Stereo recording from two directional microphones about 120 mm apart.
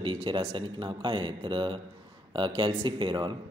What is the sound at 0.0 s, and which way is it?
A man's voice, 45° right (ahead or behind).